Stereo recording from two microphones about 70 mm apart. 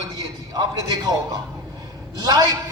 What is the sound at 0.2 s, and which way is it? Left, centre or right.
A man's voice, right.